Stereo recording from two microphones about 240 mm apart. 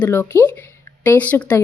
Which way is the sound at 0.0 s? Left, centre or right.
Centre.